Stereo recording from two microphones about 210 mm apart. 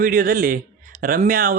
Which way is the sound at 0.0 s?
45° right (ahead or behind).